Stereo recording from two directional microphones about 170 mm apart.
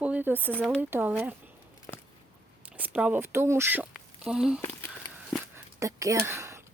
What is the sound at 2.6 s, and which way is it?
Speech, 10° right (ahead or behind).